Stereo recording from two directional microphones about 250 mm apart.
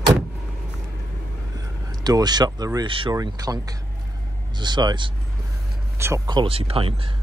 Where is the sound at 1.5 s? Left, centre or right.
Centre.